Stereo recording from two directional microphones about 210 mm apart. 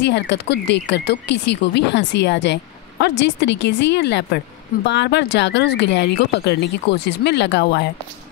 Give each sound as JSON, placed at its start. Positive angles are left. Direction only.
{"t": 0.0, "sound": "speech", "side_deg": 55}